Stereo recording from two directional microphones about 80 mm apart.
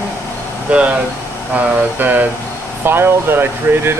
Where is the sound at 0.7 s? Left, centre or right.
Centre.